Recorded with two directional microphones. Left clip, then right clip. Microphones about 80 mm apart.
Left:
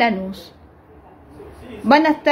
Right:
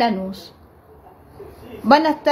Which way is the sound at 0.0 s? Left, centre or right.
Right.